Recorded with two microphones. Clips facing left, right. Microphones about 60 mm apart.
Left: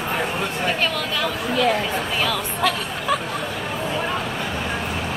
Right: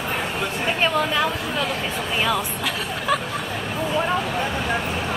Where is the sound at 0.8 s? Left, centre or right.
Right.